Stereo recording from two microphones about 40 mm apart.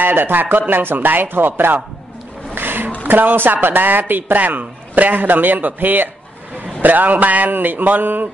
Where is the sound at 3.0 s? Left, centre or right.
Right.